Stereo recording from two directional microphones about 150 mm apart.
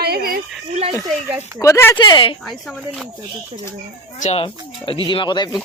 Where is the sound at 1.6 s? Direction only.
20° left (ahead or behind).